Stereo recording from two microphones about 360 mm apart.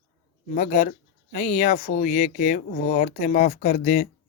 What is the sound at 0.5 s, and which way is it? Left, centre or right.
Speech, left.